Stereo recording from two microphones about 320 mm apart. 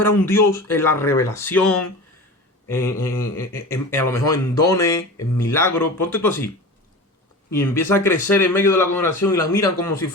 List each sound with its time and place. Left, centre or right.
0.0 s a man's voice: centre
7.5 s a man's voice: centre